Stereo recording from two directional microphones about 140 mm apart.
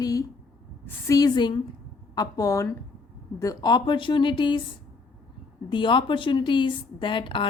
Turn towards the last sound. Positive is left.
turn(degrees=35)  # may be behind; listen again after turning